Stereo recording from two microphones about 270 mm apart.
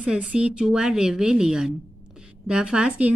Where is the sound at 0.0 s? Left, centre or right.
Centre.